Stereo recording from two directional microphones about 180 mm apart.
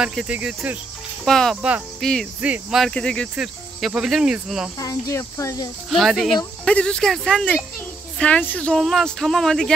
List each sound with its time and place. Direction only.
0.0 s cricket: centre (ahead or behind)
4.7 s speech: 20° left (ahead or behind)
5.9 s cricket: centre (ahead or behind)